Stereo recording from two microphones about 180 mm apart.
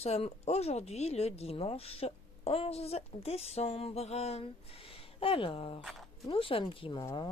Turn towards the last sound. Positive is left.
turn(degrees=25)  # may be behind; listen again after turning